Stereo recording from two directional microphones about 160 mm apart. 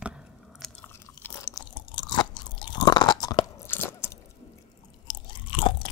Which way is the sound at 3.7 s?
15° left (ahead or behind).